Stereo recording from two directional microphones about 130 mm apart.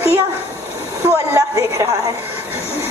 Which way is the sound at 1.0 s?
20° right (ahead or behind).